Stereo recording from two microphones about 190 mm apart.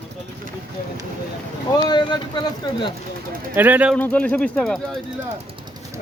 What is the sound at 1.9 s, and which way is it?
Speech, 25° left (ahead or behind).